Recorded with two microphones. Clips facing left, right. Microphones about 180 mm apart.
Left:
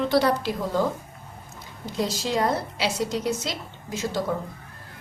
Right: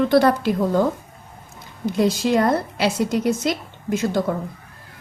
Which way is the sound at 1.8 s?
55° right (ahead or behind).